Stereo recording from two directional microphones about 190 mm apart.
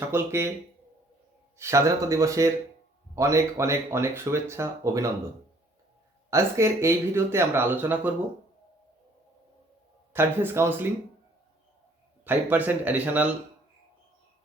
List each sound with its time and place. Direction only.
0.1 s speech: 15° right (ahead or behind)
1.5 s speech: 15° right (ahead or behind)
6.3 s speech: 15° right (ahead or behind)
10.1 s speech: 10° right (ahead or behind)
12.2 s speech: 10° right (ahead or behind)